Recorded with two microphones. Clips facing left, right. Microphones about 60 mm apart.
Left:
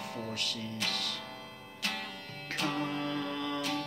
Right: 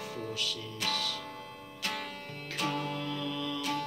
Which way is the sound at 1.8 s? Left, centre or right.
Centre.